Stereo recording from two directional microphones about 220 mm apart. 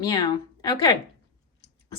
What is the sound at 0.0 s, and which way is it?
Speech, 20° left (ahead or behind).